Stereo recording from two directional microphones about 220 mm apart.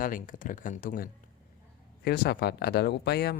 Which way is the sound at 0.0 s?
40° left (ahead or behind).